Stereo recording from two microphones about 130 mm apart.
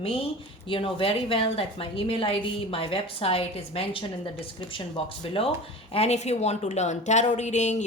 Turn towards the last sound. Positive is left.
turn(degrees=65)  # may be behind; listen again after turning